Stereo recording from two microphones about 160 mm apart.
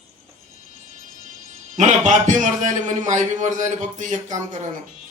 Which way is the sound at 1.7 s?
50° right (ahead or behind).